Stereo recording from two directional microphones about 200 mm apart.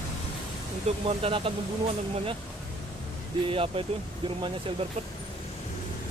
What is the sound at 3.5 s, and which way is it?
Speech, 25° right (ahead or behind).